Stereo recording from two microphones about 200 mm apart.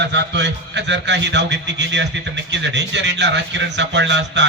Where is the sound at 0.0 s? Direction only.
60° right (ahead or behind).